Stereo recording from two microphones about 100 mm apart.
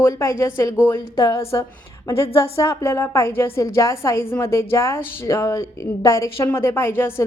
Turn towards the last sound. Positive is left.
turn(degrees=25)  # may be behind; listen again after turning